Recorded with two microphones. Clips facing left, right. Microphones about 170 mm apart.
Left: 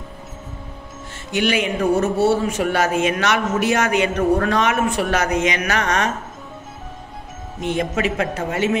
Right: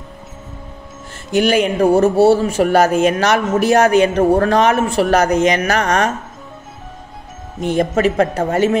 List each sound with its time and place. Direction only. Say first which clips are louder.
1.3 s speech: right 6 dB; 40° right (ahead or behind)
7.7 s speech: right 7 dB; 40° right (ahead or behind)